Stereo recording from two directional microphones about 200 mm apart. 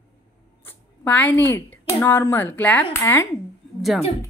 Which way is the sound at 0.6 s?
10° left (ahead or behind).